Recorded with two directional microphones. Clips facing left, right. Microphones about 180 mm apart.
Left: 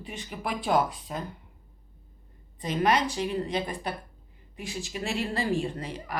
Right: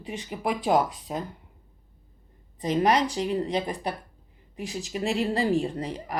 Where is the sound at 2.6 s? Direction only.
35° right (ahead or behind).